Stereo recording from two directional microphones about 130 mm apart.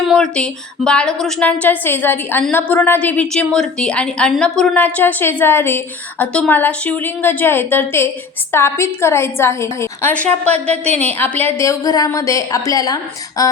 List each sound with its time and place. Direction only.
0.1 s a woman's voice: 5° left (ahead or behind); by 13.5 s 30° left (ahead or behind)